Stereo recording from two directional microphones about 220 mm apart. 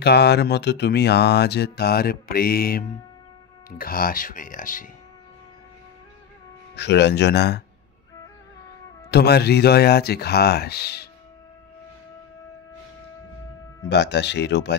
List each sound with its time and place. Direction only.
0.0 s speech: 50° left (ahead or behind)
6.7 s speech: 50° left (ahead or behind)
9.1 s speech: 45° left (ahead or behind)
13.8 s speech: 50° left (ahead or behind)